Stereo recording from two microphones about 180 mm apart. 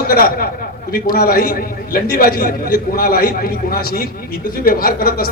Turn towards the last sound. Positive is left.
turn(degrees=55)  # may be behind; listen again after turning